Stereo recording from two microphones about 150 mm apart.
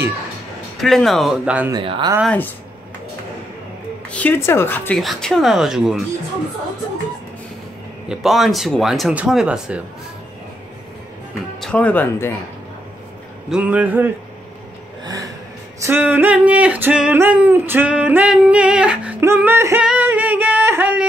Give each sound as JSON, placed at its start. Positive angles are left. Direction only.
{"t": 0.7, "sound": "speech", "side_deg": 0}
{"t": 1.7, "sound": "speech", "side_deg": -30}
{"t": 2.2, "sound": "a woman's voice", "side_deg": 10}
{"t": 4.1, "sound": "a woman's voice", "side_deg": 10}
{"t": 5.0, "sound": "speech", "side_deg": 0}
{"t": 8.1, "sound": "speech", "side_deg": 0}
{"t": 11.6, "sound": "a woman's voice", "side_deg": 10}
{"t": 13.5, "sound": "a sound", "side_deg": -10}
{"t": 15.0, "sound": "gasp", "side_deg": -25}
{"t": 15.8, "sound": "a sound", "side_deg": -10}